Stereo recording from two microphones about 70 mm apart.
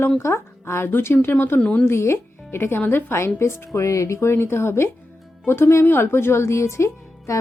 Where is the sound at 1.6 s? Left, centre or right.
Centre.